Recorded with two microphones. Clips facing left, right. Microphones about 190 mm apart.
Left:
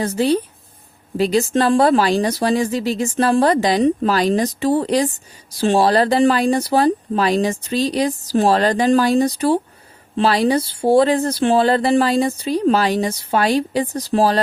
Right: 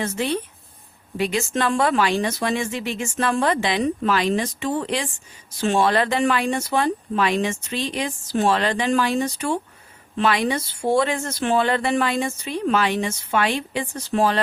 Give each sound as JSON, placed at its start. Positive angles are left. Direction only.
{"t": 0.0, "sound": "speech", "side_deg": 35}